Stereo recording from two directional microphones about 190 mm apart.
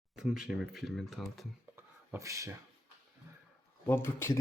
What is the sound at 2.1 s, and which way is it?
Speech, 15° right (ahead or behind).